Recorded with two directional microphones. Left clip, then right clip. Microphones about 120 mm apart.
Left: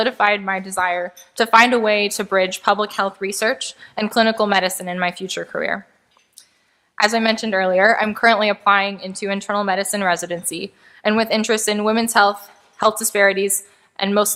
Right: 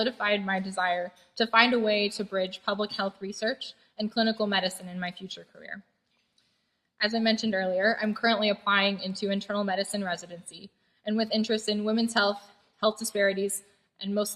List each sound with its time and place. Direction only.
0.0 s a woman's voice: 45° left (ahead or behind)
6.9 s a woman's voice: 40° left (ahead or behind)